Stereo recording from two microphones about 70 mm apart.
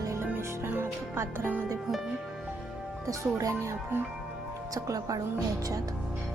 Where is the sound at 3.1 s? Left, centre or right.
Right.